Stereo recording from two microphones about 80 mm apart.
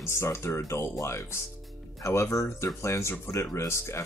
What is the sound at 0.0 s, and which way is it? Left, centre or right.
Speech, left.